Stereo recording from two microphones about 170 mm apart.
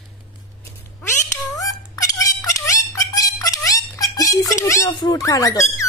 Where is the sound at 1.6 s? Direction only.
20° left (ahead or behind).